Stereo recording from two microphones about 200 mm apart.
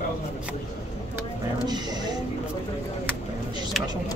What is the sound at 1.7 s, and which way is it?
Speech, 20° right (ahead or behind).